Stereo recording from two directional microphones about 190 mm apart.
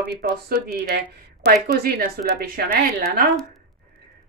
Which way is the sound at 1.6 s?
50° right (ahead or behind).